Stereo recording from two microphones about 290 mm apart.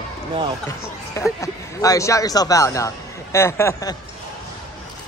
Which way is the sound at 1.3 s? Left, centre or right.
Centre.